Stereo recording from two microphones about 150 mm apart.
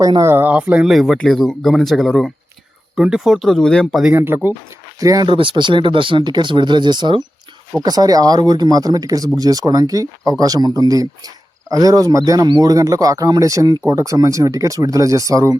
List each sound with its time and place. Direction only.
0.0 s speech: 25° right (ahead or behind); by 4.1 s centre (ahead or behind)
4.1 s speech: 15° right (ahead or behind)